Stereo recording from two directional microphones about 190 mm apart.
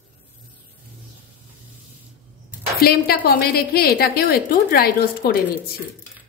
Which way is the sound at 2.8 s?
55° left (ahead or behind).